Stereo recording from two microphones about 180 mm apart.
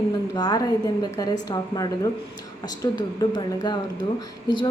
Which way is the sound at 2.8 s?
25° left (ahead or behind).